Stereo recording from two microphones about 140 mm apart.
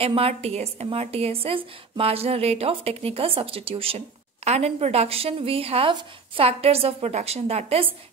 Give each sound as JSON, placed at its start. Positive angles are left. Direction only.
{"t": 0.0, "sound": "a woman's voice", "side_deg": -45}